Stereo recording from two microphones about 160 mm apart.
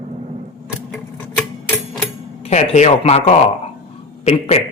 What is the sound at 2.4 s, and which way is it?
Speech, 45° left (ahead or behind).